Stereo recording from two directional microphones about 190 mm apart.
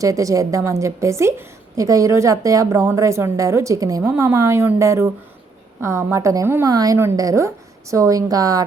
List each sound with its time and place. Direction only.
0.0 s a woman's voice: 15° right (ahead or behind)